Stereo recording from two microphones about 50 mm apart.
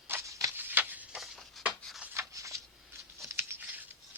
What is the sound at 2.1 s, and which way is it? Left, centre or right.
Shuffling cards, right.